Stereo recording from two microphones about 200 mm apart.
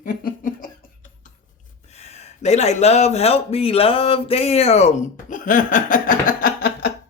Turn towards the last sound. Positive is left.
turn(degrees=45)  # may be behind; listen again after turning